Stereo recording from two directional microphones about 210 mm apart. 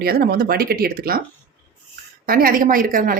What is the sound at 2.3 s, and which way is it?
Speech, 45° right (ahead or behind).